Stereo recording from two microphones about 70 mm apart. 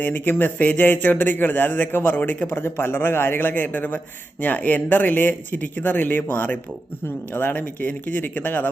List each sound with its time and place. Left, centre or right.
0.0 s speech: left